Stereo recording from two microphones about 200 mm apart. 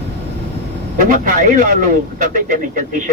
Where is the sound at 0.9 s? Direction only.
45° right (ahead or behind).